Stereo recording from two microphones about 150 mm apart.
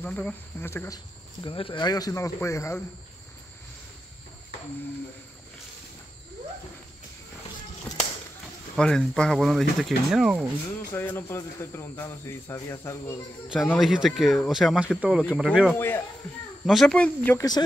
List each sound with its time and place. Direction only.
0.0 s speech: 10° left (ahead or behind)
8.7 s speech: 5° left (ahead or behind)
10.9 s speech: 15° left (ahead or behind)
13.7 s speech: centre (ahead or behind)
15.7 s speech: 15° left (ahead or behind)
16.6 s speech: centre (ahead or behind)